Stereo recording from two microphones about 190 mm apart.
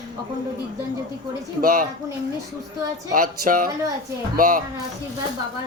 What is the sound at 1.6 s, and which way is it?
Speech, 45° right (ahead or behind).